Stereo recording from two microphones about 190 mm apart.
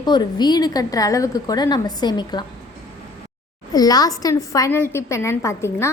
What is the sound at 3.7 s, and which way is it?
A woman's voice, 20° left (ahead or behind).